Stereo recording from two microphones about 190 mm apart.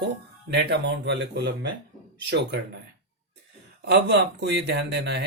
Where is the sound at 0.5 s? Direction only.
65° right (ahead or behind).